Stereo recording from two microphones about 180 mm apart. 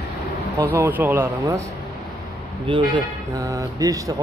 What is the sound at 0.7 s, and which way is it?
Speech, 10° right (ahead or behind).